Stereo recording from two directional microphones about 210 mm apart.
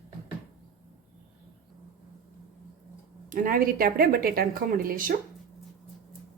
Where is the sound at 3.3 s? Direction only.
40° right (ahead or behind).